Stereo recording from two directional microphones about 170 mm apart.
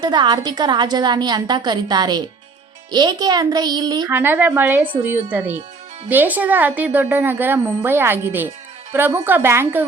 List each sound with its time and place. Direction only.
0.0 s a woman's voice: 25° right (ahead or behind)
4.1 s a woman's voice: 10° right (ahead or behind)